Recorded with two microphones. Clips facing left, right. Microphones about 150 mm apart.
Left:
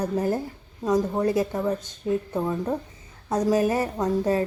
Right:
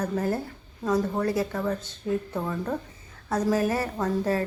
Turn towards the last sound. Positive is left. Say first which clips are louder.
# left 3 dB
turn(degrees=15)  # may be behind; listen again after turning